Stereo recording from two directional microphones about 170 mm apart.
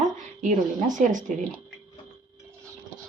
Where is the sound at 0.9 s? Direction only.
50° right (ahead or behind).